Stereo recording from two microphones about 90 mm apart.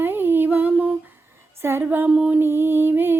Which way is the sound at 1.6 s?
30° right (ahead or behind).